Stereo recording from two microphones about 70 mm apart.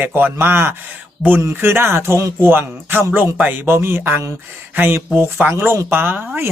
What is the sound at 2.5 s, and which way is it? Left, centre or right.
A man's voice, right.